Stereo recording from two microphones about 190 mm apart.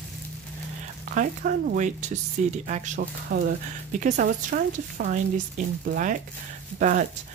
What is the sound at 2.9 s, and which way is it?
Speech, 55° right (ahead or behind).